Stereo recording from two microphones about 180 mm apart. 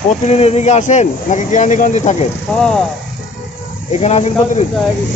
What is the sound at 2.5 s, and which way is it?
Speech, 5° left (ahead or behind).